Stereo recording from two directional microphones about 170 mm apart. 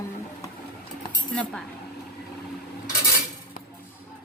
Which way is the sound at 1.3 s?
5° left (ahead or behind).